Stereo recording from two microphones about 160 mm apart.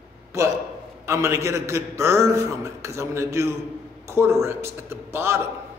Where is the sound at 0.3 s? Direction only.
20° right (ahead or behind).